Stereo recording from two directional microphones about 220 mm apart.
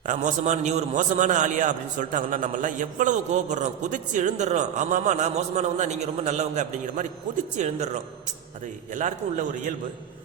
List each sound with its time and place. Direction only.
0.0 s a man's voice: 35° right (ahead or behind)
8.9 s a man's voice: 35° right (ahead or behind)